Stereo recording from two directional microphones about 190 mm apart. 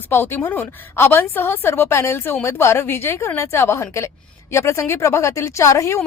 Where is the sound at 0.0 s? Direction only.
10° left (ahead or behind).